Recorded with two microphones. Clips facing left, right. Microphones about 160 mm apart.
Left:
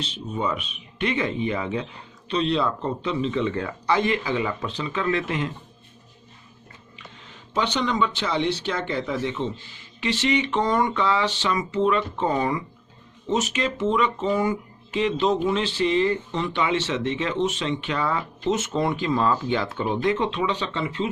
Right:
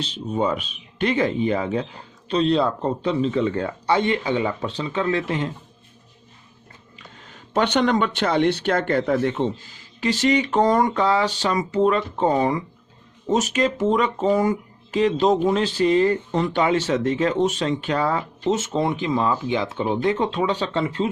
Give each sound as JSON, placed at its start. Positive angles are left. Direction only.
{"t": 0.0, "sound": "speech", "side_deg": -35}
{"t": 7.3, "sound": "speech", "side_deg": -55}